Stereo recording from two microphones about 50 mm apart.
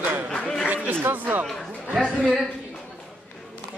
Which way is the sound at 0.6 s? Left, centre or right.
Right.